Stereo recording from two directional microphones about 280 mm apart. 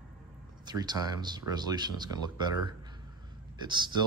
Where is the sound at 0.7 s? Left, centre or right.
Centre.